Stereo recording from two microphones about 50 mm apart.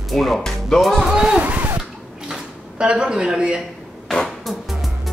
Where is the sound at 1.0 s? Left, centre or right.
Centre.